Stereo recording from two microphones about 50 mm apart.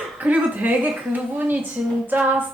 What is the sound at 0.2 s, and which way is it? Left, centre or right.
A woman's voice, right.